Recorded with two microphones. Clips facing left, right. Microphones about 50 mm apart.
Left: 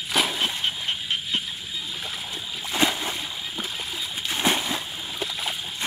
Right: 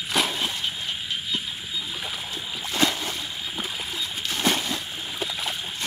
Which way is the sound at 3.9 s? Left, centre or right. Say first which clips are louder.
Left 1 dB; centre.